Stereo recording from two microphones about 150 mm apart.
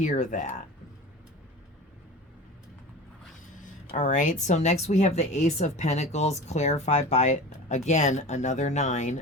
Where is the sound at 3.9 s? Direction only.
55° left (ahead or behind).